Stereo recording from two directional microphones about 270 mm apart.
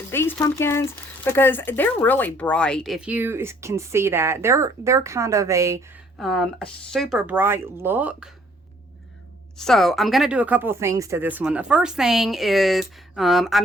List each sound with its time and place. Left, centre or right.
0.1 s speech: centre
6.1 s speech: centre
9.6 s speech: centre